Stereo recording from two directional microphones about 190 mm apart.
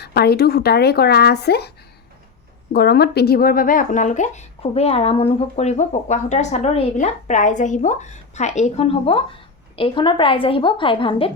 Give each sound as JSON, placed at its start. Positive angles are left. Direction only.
{"t": 0.0, "sound": "speech", "side_deg": 55}
{"t": 2.7, "sound": "a woman's voice", "side_deg": 60}